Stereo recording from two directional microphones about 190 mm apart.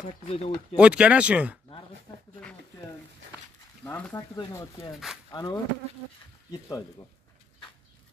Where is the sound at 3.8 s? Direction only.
15° left (ahead or behind).